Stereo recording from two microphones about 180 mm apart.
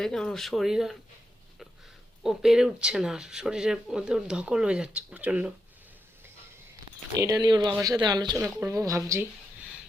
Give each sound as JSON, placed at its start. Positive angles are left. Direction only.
{"t": 0.0, "sound": "speech", "side_deg": 5}
{"t": 2.2, "sound": "speech", "side_deg": -5}
{"t": 7.2, "sound": "speech", "side_deg": -20}